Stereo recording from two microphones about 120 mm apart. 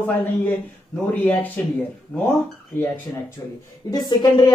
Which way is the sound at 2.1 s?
15° left (ahead or behind).